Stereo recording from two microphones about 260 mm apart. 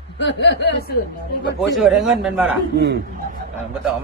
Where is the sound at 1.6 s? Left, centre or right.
Centre.